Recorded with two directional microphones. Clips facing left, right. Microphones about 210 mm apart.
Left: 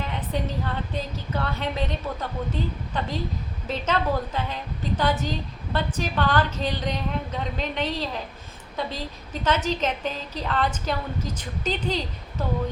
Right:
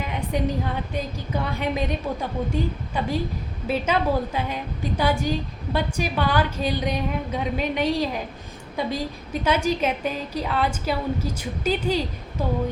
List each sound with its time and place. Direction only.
0.0 s a woman's voice: 10° right (ahead or behind)